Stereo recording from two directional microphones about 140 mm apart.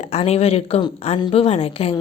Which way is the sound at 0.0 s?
50° left (ahead or behind).